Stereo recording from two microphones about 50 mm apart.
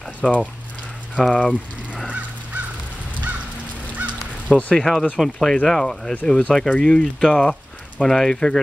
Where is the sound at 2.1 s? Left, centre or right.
Right.